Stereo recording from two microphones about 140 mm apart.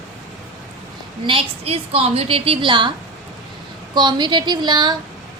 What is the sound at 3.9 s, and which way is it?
A woman's voice, 30° right (ahead or behind).